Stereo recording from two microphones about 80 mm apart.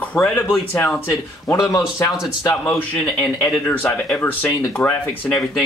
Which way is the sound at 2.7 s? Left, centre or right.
Centre.